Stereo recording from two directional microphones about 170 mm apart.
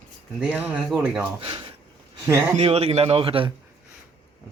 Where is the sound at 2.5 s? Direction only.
35° right (ahead or behind).